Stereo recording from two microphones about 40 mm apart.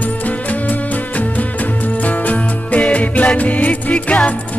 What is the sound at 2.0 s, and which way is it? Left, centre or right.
Music, left.